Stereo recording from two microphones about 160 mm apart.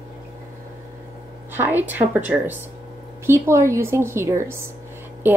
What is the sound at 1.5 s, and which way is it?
A woman's voice, 10° right (ahead or behind).